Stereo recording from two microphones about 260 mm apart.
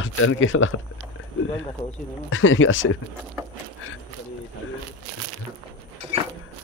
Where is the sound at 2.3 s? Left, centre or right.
Left.